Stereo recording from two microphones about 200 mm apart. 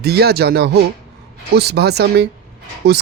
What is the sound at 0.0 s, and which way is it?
Speech, 55° right (ahead or behind).